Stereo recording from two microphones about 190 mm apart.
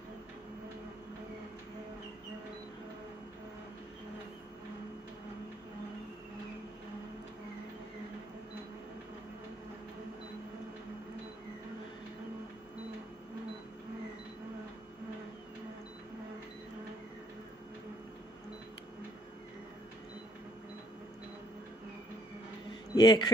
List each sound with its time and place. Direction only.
22.9 s speech: 20° left (ahead or behind)